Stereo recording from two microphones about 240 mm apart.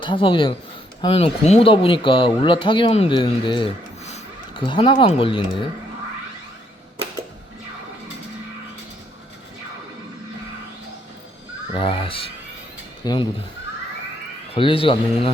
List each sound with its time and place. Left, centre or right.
0.0 s speech: left
11.7 s speech: left
14.5 s speech: left